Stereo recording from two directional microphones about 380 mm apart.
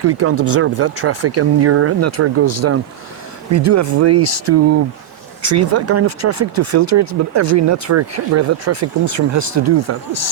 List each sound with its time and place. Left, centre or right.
0.0 s speech: right
5.7 s speech: right